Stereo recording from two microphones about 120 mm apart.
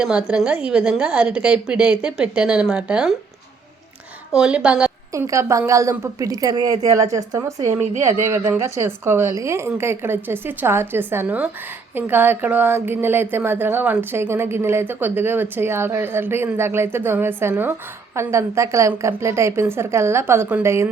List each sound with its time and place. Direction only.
0.0 s a woman's voice: 10° right (ahead or behind)
4.3 s a woman's voice: 5° right (ahead or behind)
5.1 s speech: 25° right (ahead or behind)